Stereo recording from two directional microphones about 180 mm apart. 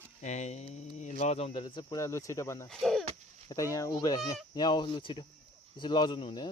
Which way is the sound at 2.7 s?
Centre (ahead or behind).